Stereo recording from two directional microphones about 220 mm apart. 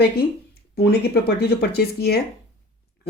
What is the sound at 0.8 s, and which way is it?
Speech, 45° left (ahead or behind).